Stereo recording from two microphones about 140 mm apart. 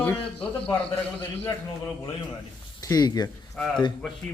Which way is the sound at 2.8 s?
25° left (ahead or behind).